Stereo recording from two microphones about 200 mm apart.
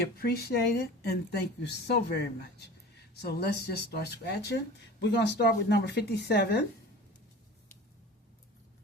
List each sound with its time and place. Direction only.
0.2 s speech: 55° left (ahead or behind)